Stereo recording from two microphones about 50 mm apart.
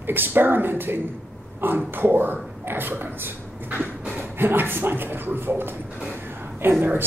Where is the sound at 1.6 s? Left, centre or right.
Right.